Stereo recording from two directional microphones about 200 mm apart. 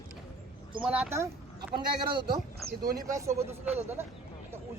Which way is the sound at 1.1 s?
15° right (ahead or behind).